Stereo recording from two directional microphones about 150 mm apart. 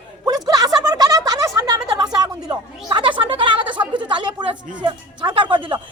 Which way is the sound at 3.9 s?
30° right (ahead or behind).